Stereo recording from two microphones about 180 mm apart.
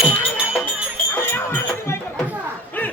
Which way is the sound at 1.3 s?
10° left (ahead or behind).